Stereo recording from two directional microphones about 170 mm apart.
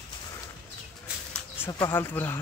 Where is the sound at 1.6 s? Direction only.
15° left (ahead or behind).